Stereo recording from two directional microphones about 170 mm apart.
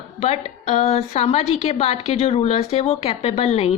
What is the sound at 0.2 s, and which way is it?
A woman's voice, 40° left (ahead or behind).